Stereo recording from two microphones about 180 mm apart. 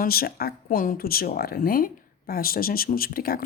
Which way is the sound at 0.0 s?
55° left (ahead or behind).